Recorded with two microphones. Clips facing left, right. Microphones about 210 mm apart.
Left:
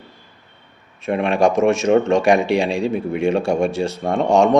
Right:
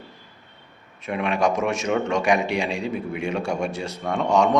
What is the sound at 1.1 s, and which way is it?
Speech, 30° left (ahead or behind).